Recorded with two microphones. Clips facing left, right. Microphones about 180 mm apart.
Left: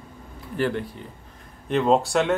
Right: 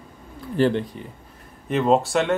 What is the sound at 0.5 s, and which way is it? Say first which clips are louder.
Speech: right 5 dB; 30° right (ahead or behind).